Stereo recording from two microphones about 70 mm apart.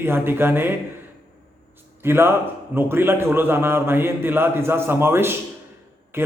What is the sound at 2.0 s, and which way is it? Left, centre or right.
A man's voice, right.